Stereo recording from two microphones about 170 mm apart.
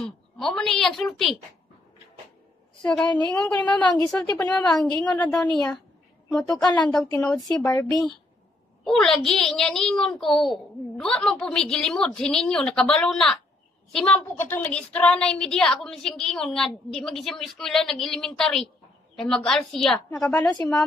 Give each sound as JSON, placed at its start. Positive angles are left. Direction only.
{"t": 0.0, "sound": "a woman's voice", "side_deg": 5}
{"t": 2.8, "sound": "a woman's voice", "side_deg": 5}
{"t": 7.4, "sound": "speech", "side_deg": 20}
{"t": 8.8, "sound": "a woman's voice", "side_deg": 0}